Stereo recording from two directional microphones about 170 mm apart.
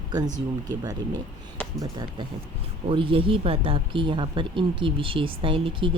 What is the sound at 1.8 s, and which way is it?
Speech, 25° right (ahead or behind).